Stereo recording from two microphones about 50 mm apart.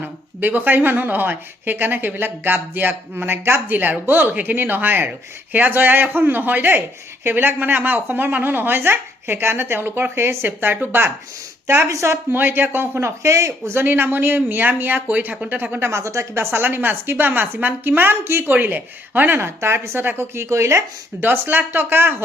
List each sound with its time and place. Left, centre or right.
0.0 s speech: right
3.8 s speech: right
11.9 s speech: right
12.3 s speech: right
13.7 s speech: right
15.8 s speech: right
16.6 s speech: right
19.4 s speech: right
20.5 s speech: right
21.2 s speech: right